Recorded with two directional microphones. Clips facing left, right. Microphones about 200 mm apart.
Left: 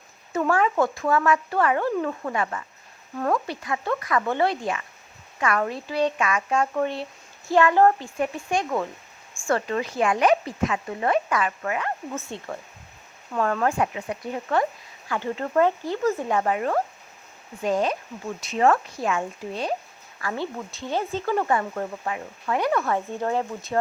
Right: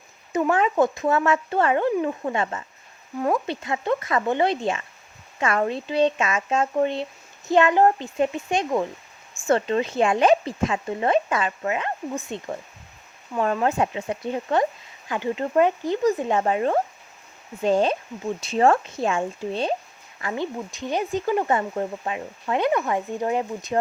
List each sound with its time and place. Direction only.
0.3 s speech: 20° right (ahead or behind)